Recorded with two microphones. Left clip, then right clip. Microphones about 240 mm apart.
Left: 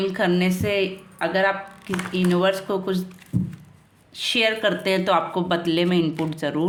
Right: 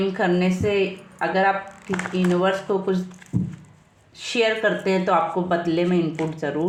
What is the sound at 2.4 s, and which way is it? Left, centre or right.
Speech, left.